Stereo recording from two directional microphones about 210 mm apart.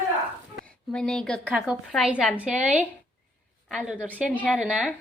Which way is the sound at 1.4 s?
10° right (ahead or behind).